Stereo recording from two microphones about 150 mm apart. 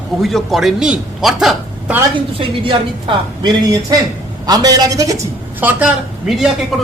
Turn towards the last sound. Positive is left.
turn(degrees=0)  # may be behind; listen again after turning